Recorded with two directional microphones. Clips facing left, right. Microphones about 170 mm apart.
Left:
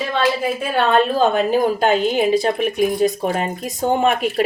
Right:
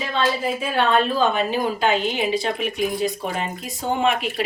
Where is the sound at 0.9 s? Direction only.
50° left (ahead or behind).